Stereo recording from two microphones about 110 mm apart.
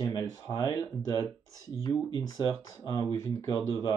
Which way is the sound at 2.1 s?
35° left (ahead or behind).